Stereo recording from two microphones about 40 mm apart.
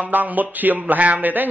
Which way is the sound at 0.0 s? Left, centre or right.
Right.